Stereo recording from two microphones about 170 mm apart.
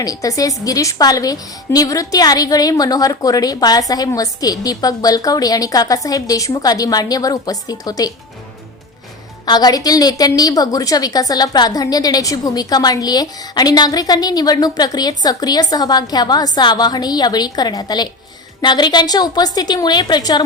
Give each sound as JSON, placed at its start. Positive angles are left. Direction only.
{"t": 0.0, "sound": "a woman's voice", "side_deg": 20}
{"t": 9.5, "sound": "a woman's voice", "side_deg": 25}